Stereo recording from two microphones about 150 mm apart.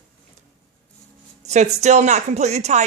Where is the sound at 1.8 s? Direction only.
50° right (ahead or behind).